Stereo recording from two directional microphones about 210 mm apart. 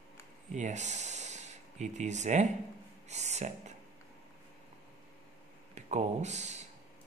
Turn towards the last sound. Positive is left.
turn(degrees=-35)  # may be behind; listen again after turning